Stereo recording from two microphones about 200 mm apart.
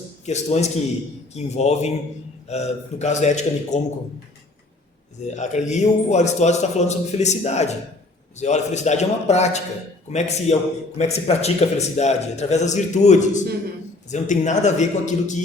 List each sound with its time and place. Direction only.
0.3 s a man's voice: 35° left (ahead or behind)
5.3 s a man's voice: 35° left (ahead or behind)